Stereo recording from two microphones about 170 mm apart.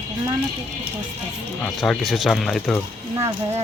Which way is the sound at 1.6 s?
Centre (ahead or behind).